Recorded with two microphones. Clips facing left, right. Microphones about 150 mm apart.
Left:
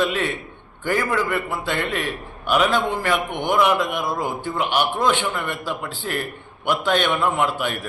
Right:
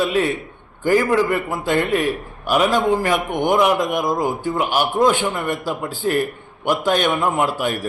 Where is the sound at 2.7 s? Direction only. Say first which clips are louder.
Right 4 dB; 40° right (ahead or behind).